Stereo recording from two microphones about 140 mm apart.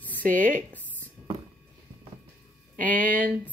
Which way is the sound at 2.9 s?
85° right.